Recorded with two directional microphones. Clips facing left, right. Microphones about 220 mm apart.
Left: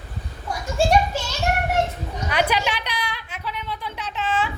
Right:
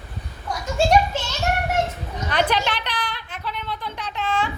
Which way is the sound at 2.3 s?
10° left (ahead or behind).